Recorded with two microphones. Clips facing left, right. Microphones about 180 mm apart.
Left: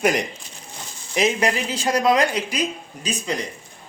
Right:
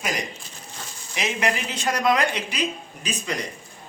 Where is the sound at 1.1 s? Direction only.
40° left (ahead or behind).